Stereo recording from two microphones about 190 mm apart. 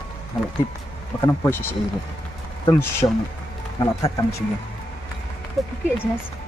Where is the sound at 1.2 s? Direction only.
15° left (ahead or behind).